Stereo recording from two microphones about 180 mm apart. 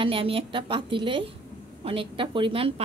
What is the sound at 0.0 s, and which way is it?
A woman's voice, 30° right (ahead or behind).